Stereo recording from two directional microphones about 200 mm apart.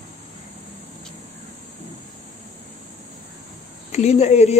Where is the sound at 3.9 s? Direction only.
35° left (ahead or behind).